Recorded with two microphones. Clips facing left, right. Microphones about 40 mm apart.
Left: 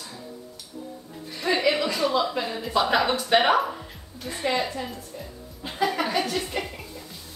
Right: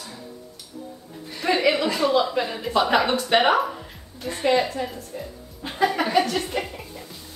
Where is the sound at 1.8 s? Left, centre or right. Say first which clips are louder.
Right 3 dB; centre.